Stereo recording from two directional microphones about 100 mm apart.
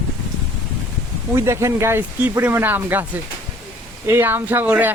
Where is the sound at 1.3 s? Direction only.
30° right (ahead or behind).